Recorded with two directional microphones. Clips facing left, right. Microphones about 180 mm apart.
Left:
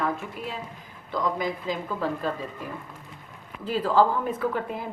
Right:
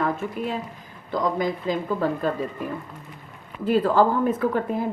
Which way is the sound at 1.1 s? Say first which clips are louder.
Right 3 dB; 50° right (ahead or behind).